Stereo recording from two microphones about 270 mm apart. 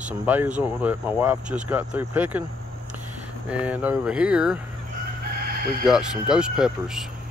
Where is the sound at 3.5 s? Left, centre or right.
Centre.